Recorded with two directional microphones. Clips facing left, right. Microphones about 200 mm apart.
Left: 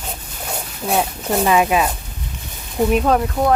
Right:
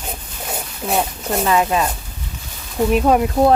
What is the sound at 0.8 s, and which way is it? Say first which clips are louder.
Speech: left 1 dB; centre (ahead or behind).